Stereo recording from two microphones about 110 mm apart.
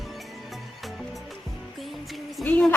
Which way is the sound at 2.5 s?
15° left (ahead or behind).